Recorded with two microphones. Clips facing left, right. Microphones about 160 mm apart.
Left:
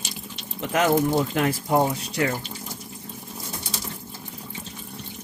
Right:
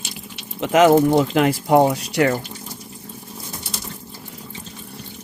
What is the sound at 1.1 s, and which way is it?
Speech, 80° right.